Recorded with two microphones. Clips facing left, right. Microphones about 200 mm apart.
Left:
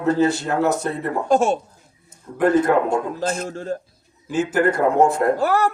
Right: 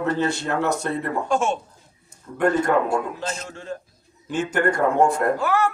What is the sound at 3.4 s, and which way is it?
Speech, 40° left (ahead or behind).